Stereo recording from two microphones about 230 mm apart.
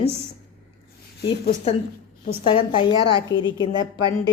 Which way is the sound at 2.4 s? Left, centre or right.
Left.